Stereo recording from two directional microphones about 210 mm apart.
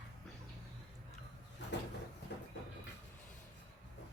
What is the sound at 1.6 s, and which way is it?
Cupboard open or close, 55° left (ahead or behind).